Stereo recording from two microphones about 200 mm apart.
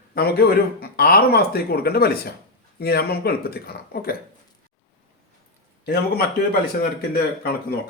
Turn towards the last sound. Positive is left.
turn(degrees=50)  # may be behind; listen again after turning